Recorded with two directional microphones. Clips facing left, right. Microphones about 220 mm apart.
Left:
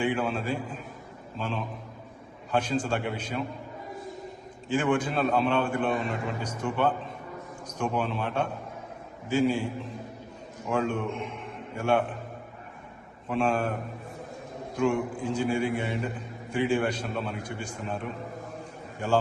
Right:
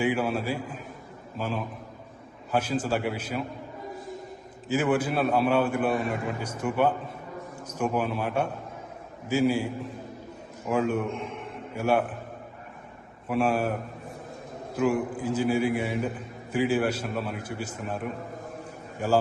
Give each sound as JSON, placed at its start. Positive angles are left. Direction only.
{"t": 0.0, "sound": "a man's voice", "side_deg": -5}
{"t": 4.7, "sound": "a man's voice", "side_deg": -5}
{"t": 10.7, "sound": "a man's voice", "side_deg": -5}
{"t": 13.2, "sound": "a man's voice", "side_deg": -5}
{"t": 14.8, "sound": "a man's voice", "side_deg": -5}